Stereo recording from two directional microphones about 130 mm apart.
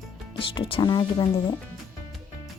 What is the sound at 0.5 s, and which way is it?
Speech, 40° left (ahead or behind).